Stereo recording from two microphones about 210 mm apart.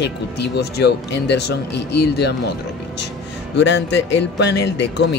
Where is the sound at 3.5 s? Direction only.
60° left (ahead or behind).